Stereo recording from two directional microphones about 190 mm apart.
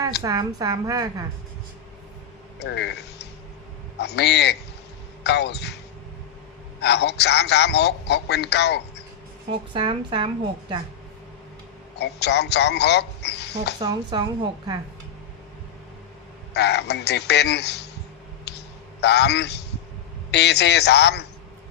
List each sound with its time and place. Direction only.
0.2 s a woman's voice: 20° right (ahead or behind)
2.6 s a man's voice: 65° left (ahead or behind)
6.8 s a man's voice: 60° left (ahead or behind)
9.5 s speech: 25° right (ahead or behind)
11.9 s a man's voice: 60° left (ahead or behind)
13.7 s speech: 20° right (ahead or behind)
16.6 s a man's voice: 60° left (ahead or behind)
18.4 s a sound: 60° left (ahead or behind)
20.3 s a man's voice: 60° left (ahead or behind)